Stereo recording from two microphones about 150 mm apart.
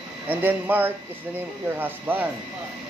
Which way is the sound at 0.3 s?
10° right (ahead or behind).